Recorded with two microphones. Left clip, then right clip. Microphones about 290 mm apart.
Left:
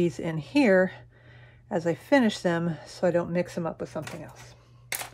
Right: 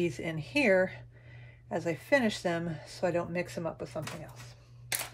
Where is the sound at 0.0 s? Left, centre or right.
Centre.